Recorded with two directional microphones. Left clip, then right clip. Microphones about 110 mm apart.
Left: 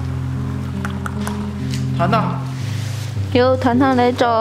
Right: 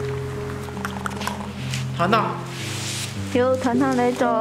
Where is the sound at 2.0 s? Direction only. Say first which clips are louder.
Left 2 dB; centre (ahead or behind).